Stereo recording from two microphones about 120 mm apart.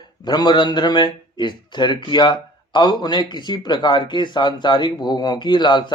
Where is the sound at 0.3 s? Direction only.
35° left (ahead or behind).